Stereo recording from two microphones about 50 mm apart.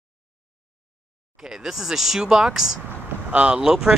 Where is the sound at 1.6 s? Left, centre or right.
Centre.